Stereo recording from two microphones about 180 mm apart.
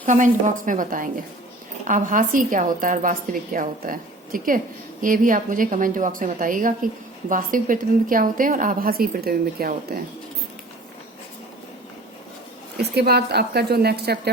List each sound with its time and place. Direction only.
0.0 s a woman's voice: 45° right (ahead or behind)
12.7 s a woman's voice: 65° right (ahead or behind)